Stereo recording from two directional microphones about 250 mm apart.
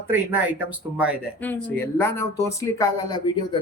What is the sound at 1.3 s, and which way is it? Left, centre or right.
Speech, centre.